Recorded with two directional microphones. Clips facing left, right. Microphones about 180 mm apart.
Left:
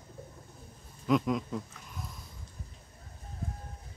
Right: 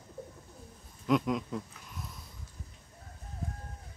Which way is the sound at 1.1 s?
Centre (ahead or behind).